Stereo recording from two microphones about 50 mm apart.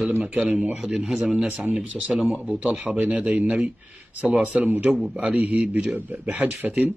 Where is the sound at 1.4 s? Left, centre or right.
Right.